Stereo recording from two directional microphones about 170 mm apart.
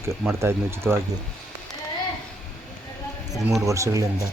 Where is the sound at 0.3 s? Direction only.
15° right (ahead or behind).